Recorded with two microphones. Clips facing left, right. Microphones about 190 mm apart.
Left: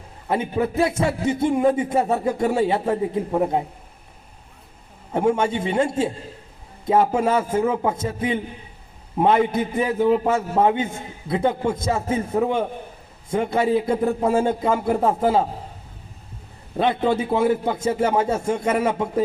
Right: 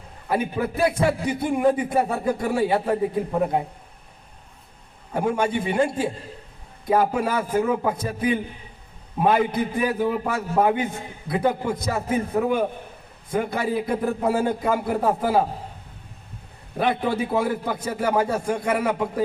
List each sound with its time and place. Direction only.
0.3 s a man's voice: 25° left (ahead or behind)
5.1 s a man's voice: 25° left (ahead or behind)
16.7 s a man's voice: 25° left (ahead or behind)